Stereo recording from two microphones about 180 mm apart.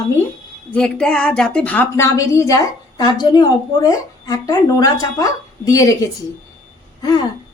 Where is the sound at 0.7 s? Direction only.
5° left (ahead or behind).